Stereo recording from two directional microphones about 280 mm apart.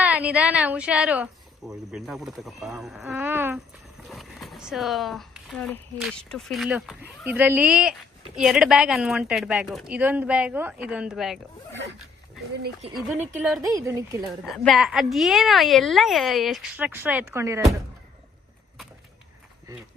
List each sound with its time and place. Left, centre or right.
0.0 s speech: centre
13.1 s a woman's voice: centre
14.2 s speech: centre